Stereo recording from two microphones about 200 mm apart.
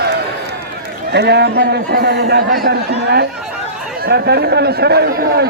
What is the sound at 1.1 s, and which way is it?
Speech, 55° right (ahead or behind).